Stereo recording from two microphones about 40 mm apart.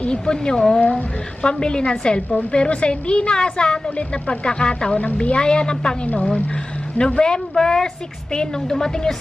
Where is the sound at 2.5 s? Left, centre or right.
Left.